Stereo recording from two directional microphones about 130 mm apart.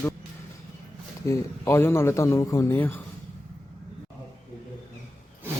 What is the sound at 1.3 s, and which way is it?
Speech, 20° left (ahead or behind).